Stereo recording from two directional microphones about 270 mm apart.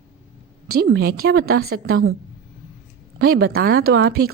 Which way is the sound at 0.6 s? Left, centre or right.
Right.